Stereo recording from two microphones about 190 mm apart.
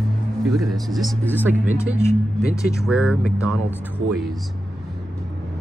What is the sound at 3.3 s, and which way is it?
Speech, 15° left (ahead or behind).